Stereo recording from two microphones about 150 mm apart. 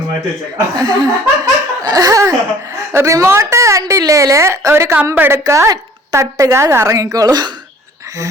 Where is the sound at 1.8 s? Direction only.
25° right (ahead or behind).